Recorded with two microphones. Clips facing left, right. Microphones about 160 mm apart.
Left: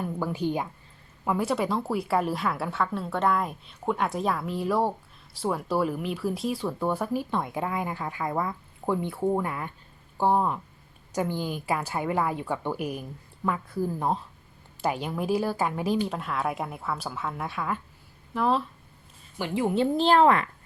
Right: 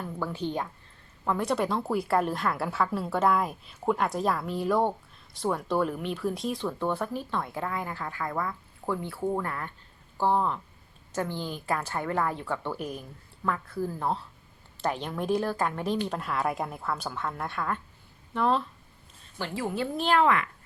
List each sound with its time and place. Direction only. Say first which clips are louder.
0.0 s a woman's voice: left 4 dB; 15° left (ahead or behind)
19.4 s a woman's voice: left 6 dB; 20° left (ahead or behind)